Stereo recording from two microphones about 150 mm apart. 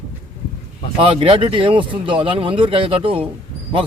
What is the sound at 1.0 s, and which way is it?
Speech, 35° right (ahead or behind).